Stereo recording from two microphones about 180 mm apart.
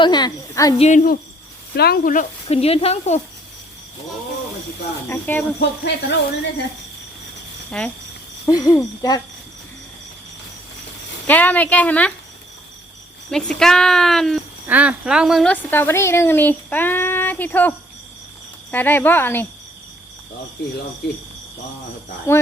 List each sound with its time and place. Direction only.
0.0 s speech: 25° left (ahead or behind)
0.8 s speech: 45° left (ahead or behind)
1.7 s speech: 60° left (ahead or behind)
2.5 s speech: 35° left (ahead or behind)
5.0 s speech: 10° left (ahead or behind)
5.5 s speech: 70° left (ahead or behind)
7.7 s speech: 5° left (ahead or behind)
8.4 s speech: 20° left (ahead or behind)
11.3 s speech: 10° left (ahead or behind)
13.3 s speech: 5° left (ahead or behind)
15.7 s speech: 10° left (ahead or behind)
22.3 s speech: 15° left (ahead or behind)